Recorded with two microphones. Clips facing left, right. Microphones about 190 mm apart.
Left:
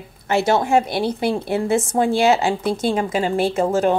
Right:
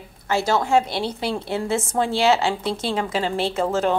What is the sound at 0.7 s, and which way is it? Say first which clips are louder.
A woman's voice: left 2 dB; 55° left (ahead or behind).